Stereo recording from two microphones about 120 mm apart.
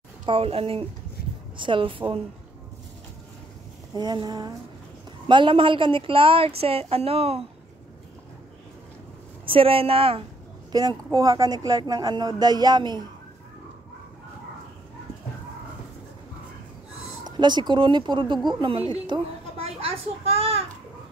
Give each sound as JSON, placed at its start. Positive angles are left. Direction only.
{"t": 0.2, "sound": "a woman's voice", "side_deg": -50}
{"t": 3.9, "sound": "a woman's voice", "side_deg": -35}
{"t": 9.5, "sound": "a woman's voice", "side_deg": -50}
{"t": 10.7, "sound": "speech", "side_deg": -35}
{"t": 17.2, "sound": "a woman's voice", "side_deg": -35}
{"t": 19.5, "sound": "a child's voice", "side_deg": -55}